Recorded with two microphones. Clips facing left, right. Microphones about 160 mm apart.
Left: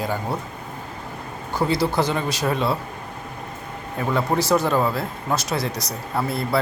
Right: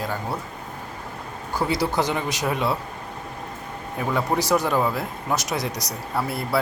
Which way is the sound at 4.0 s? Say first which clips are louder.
Left 2 dB; 10° right (ahead or behind).